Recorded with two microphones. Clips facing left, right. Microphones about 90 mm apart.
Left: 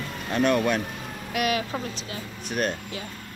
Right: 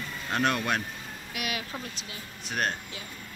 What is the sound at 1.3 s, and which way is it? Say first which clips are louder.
Speech: left 9 dB; 45° left (ahead or behind).